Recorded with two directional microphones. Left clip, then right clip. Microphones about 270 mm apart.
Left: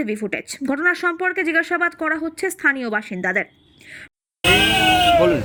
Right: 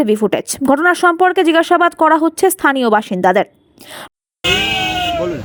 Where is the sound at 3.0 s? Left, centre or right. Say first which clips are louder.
Right 9 dB; centre.